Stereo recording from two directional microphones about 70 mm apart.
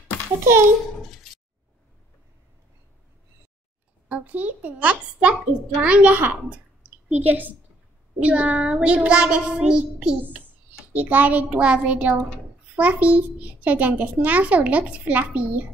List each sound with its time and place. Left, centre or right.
4.1 s a child's voice: right
10.2 s a child's voice: right